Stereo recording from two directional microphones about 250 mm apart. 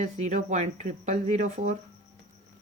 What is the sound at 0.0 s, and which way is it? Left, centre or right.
A woman's voice, right.